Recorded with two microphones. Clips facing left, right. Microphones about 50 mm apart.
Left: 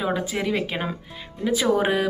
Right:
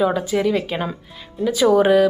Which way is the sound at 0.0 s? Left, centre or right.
Centre.